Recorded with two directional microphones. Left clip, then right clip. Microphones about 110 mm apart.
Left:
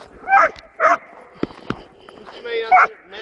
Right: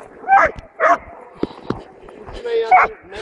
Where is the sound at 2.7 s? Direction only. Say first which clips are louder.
Even; 30° left (ahead or behind).